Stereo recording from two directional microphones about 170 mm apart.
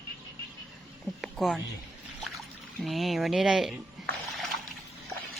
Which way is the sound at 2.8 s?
Centre (ahead or behind).